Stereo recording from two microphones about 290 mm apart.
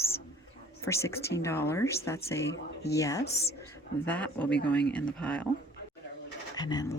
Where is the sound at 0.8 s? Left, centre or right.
Centre.